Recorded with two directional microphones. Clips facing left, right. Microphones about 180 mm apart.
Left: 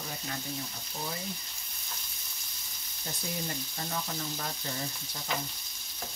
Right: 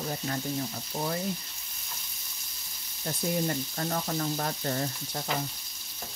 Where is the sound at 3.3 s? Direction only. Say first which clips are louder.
Right 8 dB; 55° right (ahead or behind).